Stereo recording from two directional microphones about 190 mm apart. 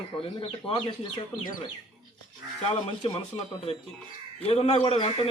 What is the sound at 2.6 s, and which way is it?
Speech, 30° left (ahead or behind).